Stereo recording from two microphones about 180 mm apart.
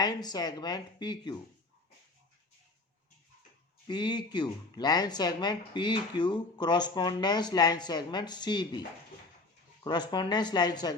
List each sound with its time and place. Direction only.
0.0 s speech: 20° left (ahead or behind)
3.8 s speech: 25° left (ahead or behind)
9.8 s speech: 25° left (ahead or behind)